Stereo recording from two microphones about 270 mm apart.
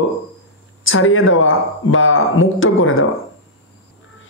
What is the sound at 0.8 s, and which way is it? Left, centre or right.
Speech, left.